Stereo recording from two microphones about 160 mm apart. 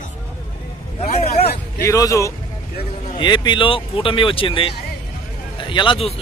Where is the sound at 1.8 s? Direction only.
20° left (ahead or behind).